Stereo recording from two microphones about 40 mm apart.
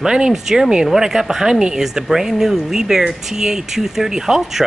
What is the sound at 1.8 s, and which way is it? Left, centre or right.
Speech, centre.